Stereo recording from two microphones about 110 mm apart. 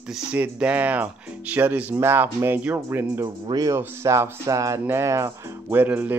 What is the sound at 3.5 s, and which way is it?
Speech, 35° right (ahead or behind).